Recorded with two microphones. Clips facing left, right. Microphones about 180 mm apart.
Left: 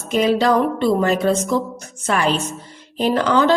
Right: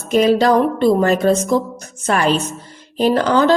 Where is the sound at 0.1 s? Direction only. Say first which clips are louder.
Right 3 dB; 40° right (ahead or behind).